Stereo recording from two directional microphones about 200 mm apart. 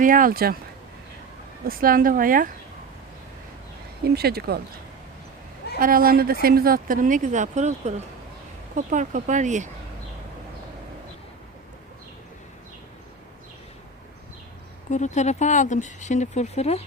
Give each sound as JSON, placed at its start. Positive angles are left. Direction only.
{"t": 0.0, "sound": "speech", "side_deg": -45}
{"t": 1.6, "sound": "speech", "side_deg": -45}
{"t": 4.0, "sound": "speech", "side_deg": -50}
{"t": 5.8, "sound": "speech", "side_deg": -45}
{"t": 14.8, "sound": "speech", "side_deg": 35}